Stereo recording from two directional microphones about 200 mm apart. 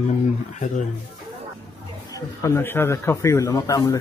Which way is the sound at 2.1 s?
15° left (ahead or behind).